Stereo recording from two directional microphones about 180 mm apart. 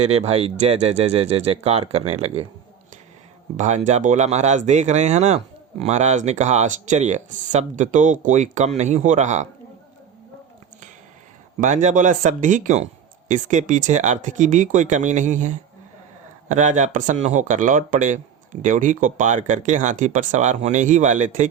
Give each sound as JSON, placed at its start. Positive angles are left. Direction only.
{"t": 0.0, "sound": "speech", "side_deg": -35}
{"t": 3.6, "sound": "speech", "side_deg": -40}
{"t": 11.6, "sound": "speech", "side_deg": -40}